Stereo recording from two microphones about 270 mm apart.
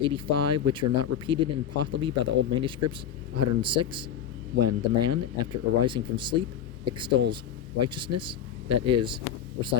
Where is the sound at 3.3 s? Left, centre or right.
Right.